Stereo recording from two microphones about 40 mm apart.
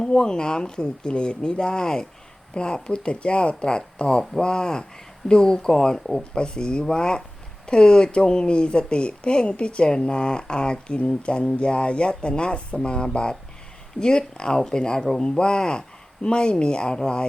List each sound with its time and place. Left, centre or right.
0.0 s speech: centre